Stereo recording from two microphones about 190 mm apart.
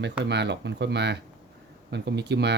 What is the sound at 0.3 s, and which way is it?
Speech, 65° right (ahead or behind).